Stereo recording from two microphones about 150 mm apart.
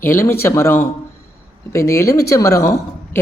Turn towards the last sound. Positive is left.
turn(degrees=20)  # may be behind; listen again after turning